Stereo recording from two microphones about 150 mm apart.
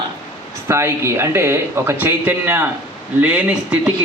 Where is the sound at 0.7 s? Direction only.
15° right (ahead or behind).